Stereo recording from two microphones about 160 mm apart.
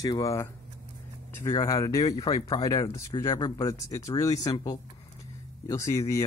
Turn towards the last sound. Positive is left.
turn(degrees=20)  # may be behind; listen again after turning